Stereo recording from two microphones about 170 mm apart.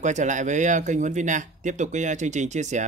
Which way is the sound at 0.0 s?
45° right (ahead or behind).